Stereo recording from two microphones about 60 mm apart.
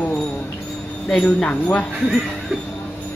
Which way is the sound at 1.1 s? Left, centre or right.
Centre.